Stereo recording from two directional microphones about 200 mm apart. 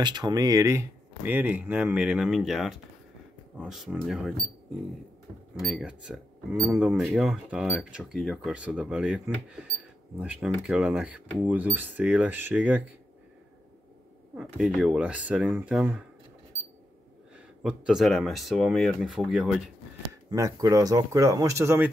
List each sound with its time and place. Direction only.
0.0 s speech: 20° right (ahead or behind); by 4.3 s 5° right (ahead or behind)
5.6 s speech: centre (ahead or behind)
14.3 s speech: 5° right (ahead or behind)
17.6 s speech: 5° right (ahead or behind)
20.2 s speech: 15° right (ahead or behind)